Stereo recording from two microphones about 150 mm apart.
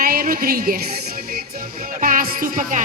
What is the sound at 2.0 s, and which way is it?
Music, 65° right (ahead or behind).